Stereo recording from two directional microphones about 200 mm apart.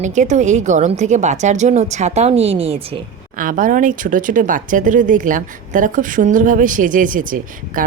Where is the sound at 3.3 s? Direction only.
45° right (ahead or behind).